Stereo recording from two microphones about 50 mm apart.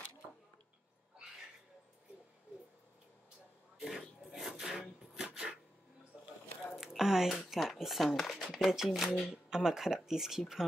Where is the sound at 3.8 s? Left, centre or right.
Centre.